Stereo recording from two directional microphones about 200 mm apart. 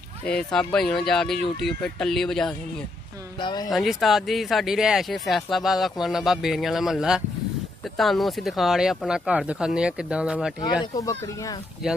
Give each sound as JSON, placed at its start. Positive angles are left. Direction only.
{"t": 0.2, "sound": "speech", "side_deg": 5}
{"t": 3.3, "sound": "speech", "side_deg": 20}
{"t": 3.7, "sound": "speech", "side_deg": 0}
{"t": 10.6, "sound": "speech", "side_deg": 20}